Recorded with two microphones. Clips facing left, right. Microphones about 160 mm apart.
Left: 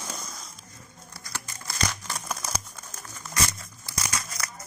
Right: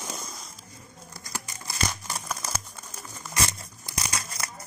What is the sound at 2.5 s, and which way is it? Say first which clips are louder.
Crumpling: even; 5° right (ahead or behind).